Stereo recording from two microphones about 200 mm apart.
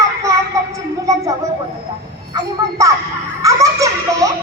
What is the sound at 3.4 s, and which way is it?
Baby laughter, 15° right (ahead or behind).